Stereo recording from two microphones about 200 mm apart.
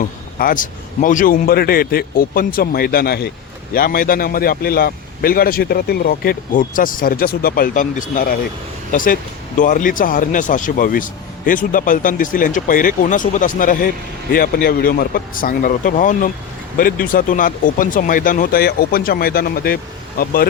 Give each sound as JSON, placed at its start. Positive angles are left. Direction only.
{"t": 0.3, "sound": "a man's voice", "side_deg": 45}